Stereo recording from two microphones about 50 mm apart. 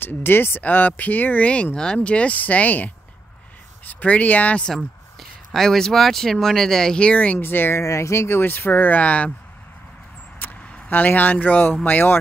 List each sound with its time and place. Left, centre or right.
0.0 s speech: left
1.5 s speech: left
5.5 s speech: centre
7.0 s speech: left
7.3 s speech: left
7.8 s speech: left
8.5 s speech: left
10.4 s vehicle: left
10.9 s speech: left